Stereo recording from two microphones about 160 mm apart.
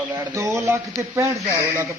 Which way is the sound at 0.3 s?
15° right (ahead or behind).